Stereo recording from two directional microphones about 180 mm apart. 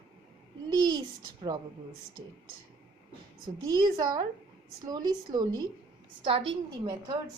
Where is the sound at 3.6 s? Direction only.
25° right (ahead or behind).